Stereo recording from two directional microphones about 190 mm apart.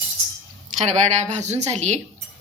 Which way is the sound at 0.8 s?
35° right (ahead or behind).